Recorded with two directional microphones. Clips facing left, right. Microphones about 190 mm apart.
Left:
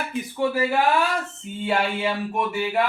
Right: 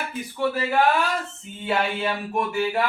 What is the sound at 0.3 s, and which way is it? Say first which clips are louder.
Speech: left 2 dB; 15° left (ahead or behind).